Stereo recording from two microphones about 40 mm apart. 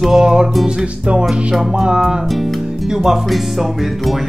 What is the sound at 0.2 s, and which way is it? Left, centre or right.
Music, centre.